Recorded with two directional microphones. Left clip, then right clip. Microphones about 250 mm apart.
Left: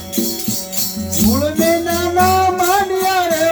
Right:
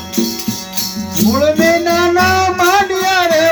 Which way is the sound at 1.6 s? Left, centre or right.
Right.